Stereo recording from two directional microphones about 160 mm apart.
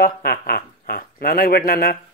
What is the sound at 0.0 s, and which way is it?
Speech, 70° left (ahead or behind).